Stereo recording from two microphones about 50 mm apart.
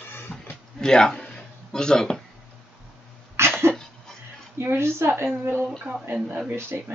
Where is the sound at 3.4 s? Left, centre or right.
Right.